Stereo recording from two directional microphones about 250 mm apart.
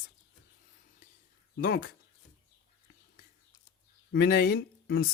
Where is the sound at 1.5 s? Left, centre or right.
Left.